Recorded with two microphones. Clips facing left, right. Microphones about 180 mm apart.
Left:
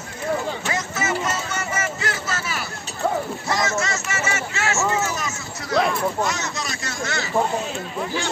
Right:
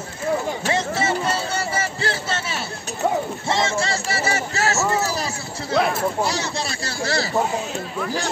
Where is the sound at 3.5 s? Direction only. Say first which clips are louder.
Right 2 dB; 30° right (ahead or behind).